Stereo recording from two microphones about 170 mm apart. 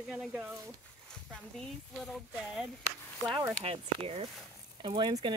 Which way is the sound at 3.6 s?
35° right (ahead or behind).